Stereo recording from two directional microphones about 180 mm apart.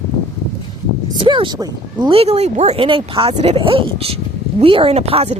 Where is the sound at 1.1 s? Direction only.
25° right (ahead or behind).